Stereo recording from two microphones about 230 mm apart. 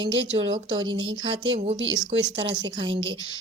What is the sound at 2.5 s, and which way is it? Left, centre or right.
Speech, centre.